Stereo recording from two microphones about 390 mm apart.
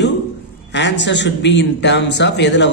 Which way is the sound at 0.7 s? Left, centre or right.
Left.